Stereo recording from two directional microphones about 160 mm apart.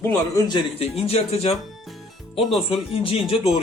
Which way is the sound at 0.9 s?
40° left (ahead or behind).